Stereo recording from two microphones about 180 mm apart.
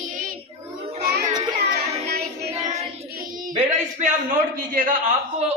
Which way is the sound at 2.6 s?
40° right (ahead or behind).